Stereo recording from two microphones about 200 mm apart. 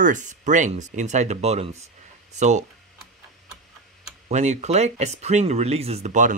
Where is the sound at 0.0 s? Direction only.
40° right (ahead or behind).